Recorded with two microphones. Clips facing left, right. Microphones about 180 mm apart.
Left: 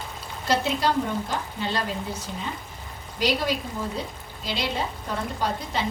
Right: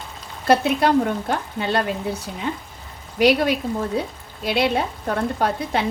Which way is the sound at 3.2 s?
65° right (ahead or behind).